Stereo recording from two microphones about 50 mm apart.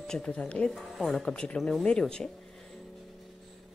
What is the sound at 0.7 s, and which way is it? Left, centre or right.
A woman's voice, centre.